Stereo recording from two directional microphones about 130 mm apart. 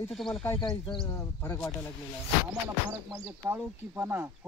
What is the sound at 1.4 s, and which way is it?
Speech, 20° left (ahead or behind).